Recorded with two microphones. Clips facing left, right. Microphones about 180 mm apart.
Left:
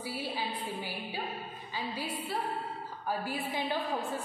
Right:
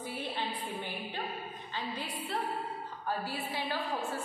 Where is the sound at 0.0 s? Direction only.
10° left (ahead or behind).